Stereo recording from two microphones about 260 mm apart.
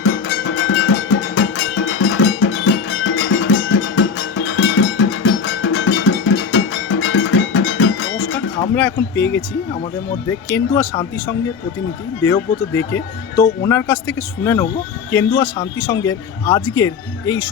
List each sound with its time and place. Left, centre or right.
0.0 s music: left
8.7 s speech: centre